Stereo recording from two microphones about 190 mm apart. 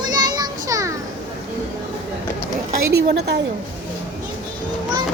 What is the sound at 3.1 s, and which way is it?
Speech, 60° right (ahead or behind).